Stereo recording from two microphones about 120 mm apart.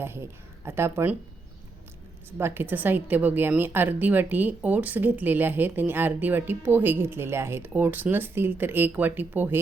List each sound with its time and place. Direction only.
0.0 s speech: 20° right (ahead or behind)
2.4 s a woman's voice: 15° right (ahead or behind)